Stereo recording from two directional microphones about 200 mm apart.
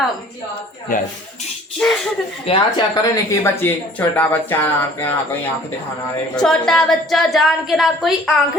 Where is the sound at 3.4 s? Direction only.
10° left (ahead or behind).